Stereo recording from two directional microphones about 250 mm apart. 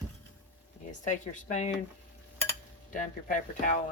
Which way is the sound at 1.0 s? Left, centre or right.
Left.